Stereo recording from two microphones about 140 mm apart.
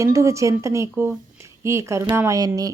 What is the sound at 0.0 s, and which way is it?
Speech, 20° right (ahead or behind).